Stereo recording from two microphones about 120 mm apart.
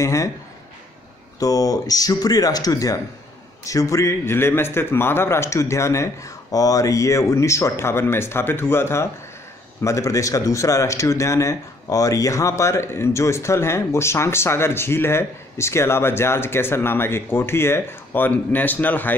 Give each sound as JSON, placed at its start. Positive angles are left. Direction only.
{"t": 0.0, "sound": "speech", "side_deg": 25}
{"t": 1.4, "sound": "speech", "side_deg": 30}